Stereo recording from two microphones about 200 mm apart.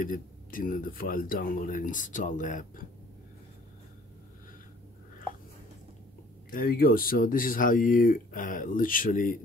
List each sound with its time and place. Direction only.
0.0 s speech: 45° left (ahead or behind)
6.5 s speech: 45° left (ahead or behind)